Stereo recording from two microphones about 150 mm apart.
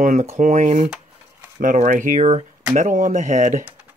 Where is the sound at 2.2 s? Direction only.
45° right (ahead or behind).